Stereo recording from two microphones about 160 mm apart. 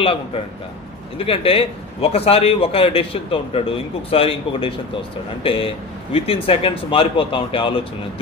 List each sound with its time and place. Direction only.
0.0 s a man's voice: 35° left (ahead or behind)